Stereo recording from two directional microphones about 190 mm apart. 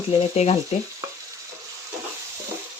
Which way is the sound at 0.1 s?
35° left (ahead or behind).